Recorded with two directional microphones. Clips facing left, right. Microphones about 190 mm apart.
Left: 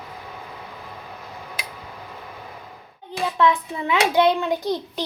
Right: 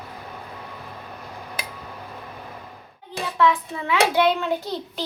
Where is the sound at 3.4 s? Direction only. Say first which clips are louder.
Even; 20° left (ahead or behind).